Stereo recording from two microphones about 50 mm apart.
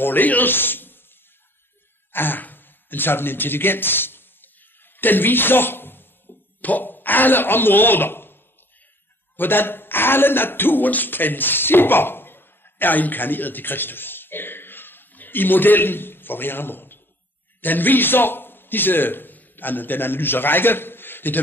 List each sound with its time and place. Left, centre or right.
0.0 s speech: left
2.1 s a sound: left
9.4 s a man's voice: left